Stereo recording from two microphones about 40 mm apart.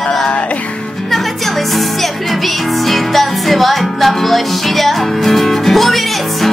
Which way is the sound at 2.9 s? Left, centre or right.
Centre.